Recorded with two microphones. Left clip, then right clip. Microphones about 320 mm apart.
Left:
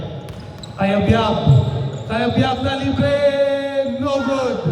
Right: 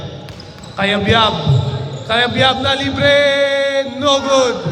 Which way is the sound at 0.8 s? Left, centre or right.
Centre.